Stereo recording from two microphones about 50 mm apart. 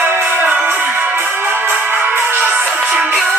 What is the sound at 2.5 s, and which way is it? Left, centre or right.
Music, right.